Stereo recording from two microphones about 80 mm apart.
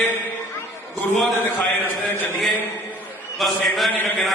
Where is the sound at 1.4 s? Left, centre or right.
Left.